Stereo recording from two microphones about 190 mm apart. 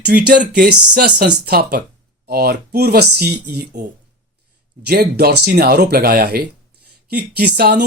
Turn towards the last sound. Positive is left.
turn(degrees=-55)  # may be behind; listen again after turning